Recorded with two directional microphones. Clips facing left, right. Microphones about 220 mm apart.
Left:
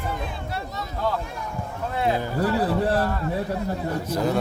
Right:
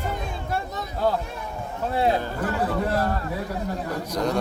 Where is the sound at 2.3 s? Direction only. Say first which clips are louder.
Left 3 dB; 35° left (ahead or behind).